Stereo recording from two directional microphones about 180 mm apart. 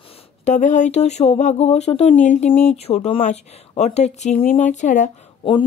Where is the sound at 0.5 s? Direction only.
45° left (ahead or behind).